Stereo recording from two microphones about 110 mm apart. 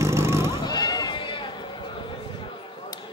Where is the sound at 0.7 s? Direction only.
35° left (ahead or behind).